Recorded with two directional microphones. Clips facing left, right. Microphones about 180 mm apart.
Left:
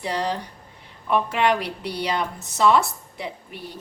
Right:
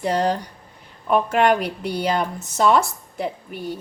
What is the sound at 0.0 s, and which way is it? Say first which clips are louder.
Speech: right 5 dB; 45° right (ahead or behind).